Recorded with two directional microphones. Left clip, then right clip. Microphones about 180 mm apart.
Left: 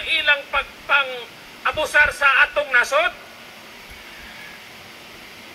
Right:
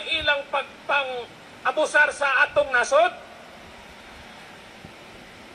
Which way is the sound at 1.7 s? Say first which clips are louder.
Left 2 dB; 35° right (ahead or behind).